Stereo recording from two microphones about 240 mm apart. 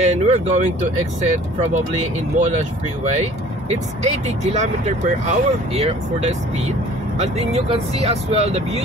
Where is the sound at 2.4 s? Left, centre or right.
Right.